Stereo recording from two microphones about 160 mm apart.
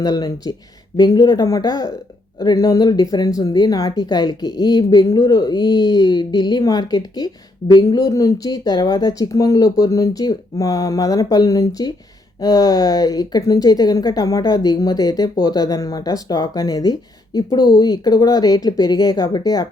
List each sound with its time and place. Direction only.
0.0 s a woman's voice: 25° left (ahead or behind)